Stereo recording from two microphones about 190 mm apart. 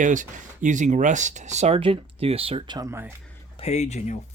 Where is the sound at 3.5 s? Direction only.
35° left (ahead or behind).